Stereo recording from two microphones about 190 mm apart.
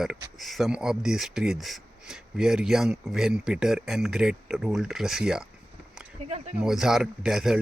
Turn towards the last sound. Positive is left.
turn(degrees=0)  # may be behind; listen again after turning